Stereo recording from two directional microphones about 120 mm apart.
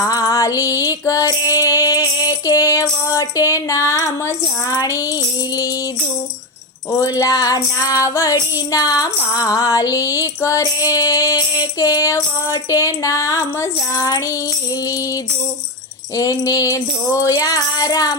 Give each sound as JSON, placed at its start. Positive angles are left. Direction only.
{"t": 0.0, "sound": "music", "side_deg": 30}
{"t": 4.8, "sound": "female singing", "side_deg": 25}
{"t": 7.0, "sound": "female singing", "side_deg": 30}
{"t": 16.1, "sound": "female singing", "side_deg": 30}